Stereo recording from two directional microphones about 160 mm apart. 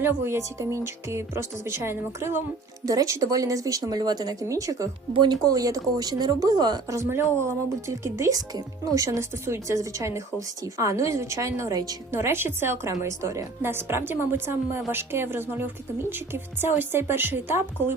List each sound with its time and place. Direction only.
0.0 s a woman's voice: 15° right (ahead or behind)